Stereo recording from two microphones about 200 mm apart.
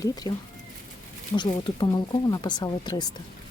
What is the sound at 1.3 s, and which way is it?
Speech, 25° left (ahead or behind).